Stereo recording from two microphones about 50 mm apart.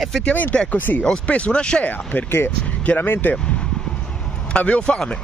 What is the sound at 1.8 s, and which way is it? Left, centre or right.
Speech, left.